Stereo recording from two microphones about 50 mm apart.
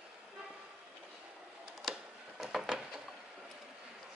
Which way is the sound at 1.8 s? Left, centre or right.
Centre.